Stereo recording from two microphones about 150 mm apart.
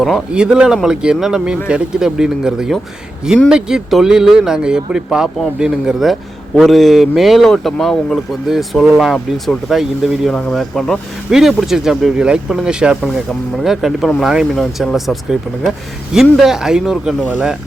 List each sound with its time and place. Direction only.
0.0 s speech: 5° right (ahead or behind)